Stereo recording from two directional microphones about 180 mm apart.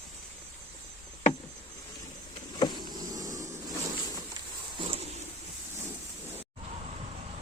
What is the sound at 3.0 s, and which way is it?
Vehicle, 20° right (ahead or behind).